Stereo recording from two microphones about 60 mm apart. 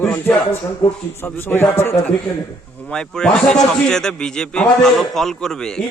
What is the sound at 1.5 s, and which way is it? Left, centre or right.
Speech, left.